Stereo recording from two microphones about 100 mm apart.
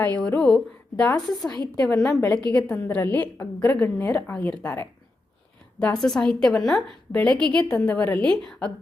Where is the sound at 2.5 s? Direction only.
15° left (ahead or behind).